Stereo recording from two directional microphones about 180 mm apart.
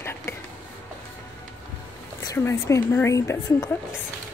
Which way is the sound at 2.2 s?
15° left (ahead or behind).